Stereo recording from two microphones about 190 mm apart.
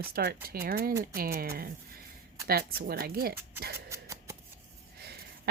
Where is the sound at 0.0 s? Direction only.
55° right (ahead or behind).